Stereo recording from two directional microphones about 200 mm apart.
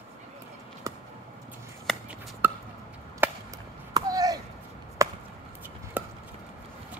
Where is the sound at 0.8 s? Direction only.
15° right (ahead or behind).